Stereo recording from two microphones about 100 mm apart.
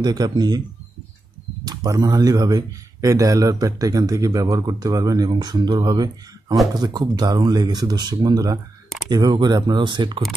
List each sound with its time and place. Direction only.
0.0 s speech: 45° right (ahead or behind)
1.6 s speech: 40° right (ahead or behind)